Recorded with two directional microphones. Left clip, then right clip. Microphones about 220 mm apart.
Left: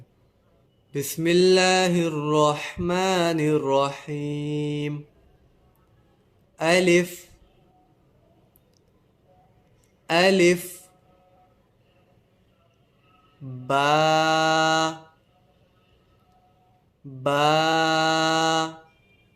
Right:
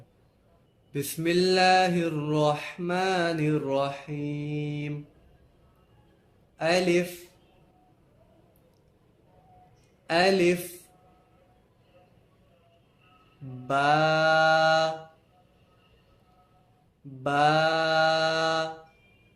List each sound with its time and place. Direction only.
0.9 s mantra: 15° left (ahead or behind)
6.6 s mantra: 25° left (ahead or behind)
10.1 s mantra: 20° left (ahead or behind)
13.7 s mantra: 20° left (ahead or behind)
17.2 s mantra: 20° left (ahead or behind)